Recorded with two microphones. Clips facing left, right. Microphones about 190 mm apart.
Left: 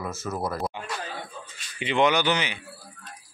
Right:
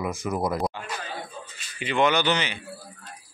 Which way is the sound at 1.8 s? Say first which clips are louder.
Even; 20° left (ahead or behind).